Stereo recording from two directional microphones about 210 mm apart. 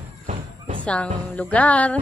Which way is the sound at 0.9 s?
5° left (ahead or behind).